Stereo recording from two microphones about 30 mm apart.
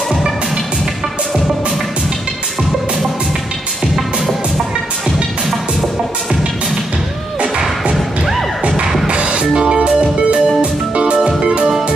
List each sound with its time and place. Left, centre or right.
7.9 s music: centre
8.6 s music: right